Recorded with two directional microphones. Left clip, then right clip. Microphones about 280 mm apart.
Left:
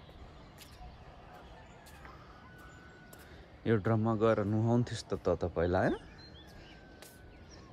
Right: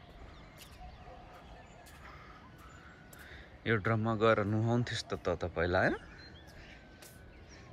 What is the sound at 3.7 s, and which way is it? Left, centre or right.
Speech, centre.